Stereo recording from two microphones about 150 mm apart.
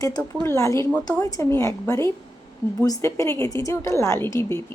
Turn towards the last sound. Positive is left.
turn(degrees=15)  # may be behind; listen again after turning